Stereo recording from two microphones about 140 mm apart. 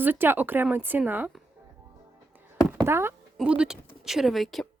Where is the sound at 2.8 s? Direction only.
20° right (ahead or behind).